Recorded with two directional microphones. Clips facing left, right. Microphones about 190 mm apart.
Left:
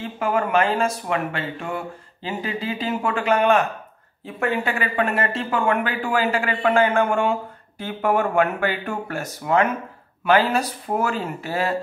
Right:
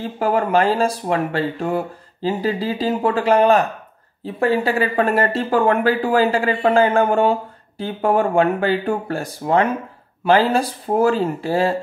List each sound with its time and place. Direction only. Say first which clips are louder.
0.0 s speech: right 4 dB; 35° right (ahead or behind)